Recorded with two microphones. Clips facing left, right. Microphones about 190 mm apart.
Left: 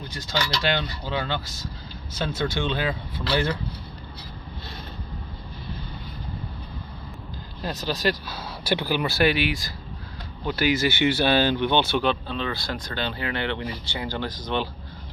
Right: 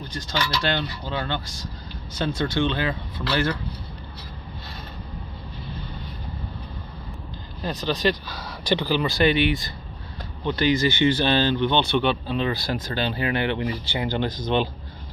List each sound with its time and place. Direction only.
0.1 s speech: 10° left (ahead or behind)
7.6 s speech: 5° left (ahead or behind)
12.3 s speech: 15° right (ahead or behind)